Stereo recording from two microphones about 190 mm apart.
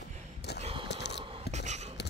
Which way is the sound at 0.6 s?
30° right (ahead or behind).